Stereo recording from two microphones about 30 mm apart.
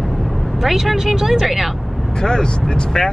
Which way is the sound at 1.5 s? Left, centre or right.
Centre.